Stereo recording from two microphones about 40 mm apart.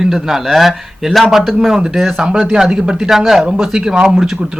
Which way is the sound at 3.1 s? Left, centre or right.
Centre.